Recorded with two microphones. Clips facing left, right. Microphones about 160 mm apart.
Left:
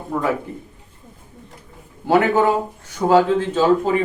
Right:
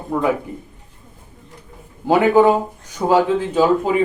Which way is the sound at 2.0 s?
15° right (ahead or behind).